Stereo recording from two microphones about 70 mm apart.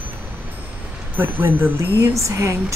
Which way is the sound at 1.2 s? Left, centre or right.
Right.